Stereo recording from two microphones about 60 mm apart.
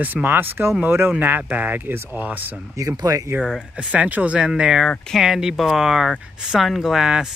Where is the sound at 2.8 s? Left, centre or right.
Right.